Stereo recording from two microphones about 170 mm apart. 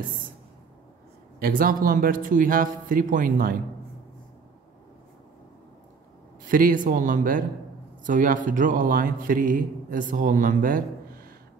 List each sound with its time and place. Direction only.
1.4 s speech: 55° right (ahead or behind)
6.4 s a man's voice: 55° right (ahead or behind)